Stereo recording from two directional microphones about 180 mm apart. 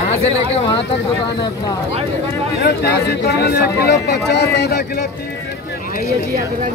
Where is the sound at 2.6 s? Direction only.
60° left (ahead or behind).